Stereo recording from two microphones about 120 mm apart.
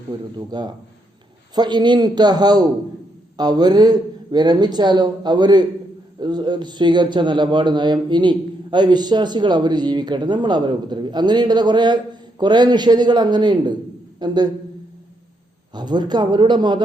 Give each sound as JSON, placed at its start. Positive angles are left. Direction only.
{"t": 0.3, "sound": "a man's voice", "side_deg": -35}
{"t": 15.7, "sound": "a man's voice", "side_deg": -35}